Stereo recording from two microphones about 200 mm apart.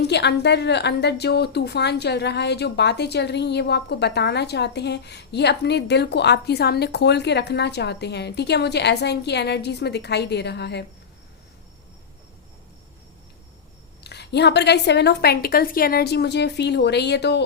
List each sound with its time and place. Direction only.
0.0 s a woman's voice: 55° left (ahead or behind)
14.0 s a woman's voice: 55° left (ahead or behind)